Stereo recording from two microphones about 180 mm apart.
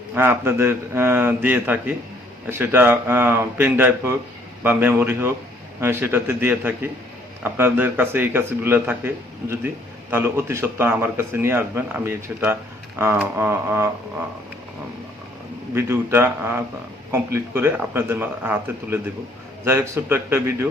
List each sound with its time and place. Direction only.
0.1 s speech: 10° right (ahead or behind)
15.7 s speech: 15° right (ahead or behind)